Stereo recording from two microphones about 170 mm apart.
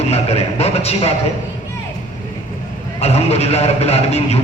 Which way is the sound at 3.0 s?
40° left (ahead or behind).